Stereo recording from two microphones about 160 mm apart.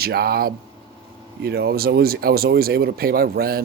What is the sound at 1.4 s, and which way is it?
Speech, 80° right.